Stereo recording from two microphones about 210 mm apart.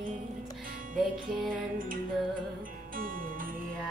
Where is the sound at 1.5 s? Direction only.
40° right (ahead or behind).